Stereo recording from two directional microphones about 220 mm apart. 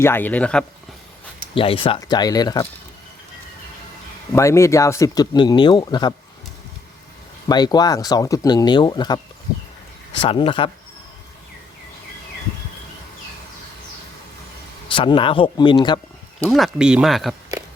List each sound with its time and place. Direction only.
0.0 s speech: 10° left (ahead or behind)
1.5 s speech: 25° left (ahead or behind)
4.3 s speech: 15° left (ahead or behind)
7.4 s speech: 20° left (ahead or behind)
14.8 s speech: 25° left (ahead or behind)
16.4 s speech: centre (ahead or behind)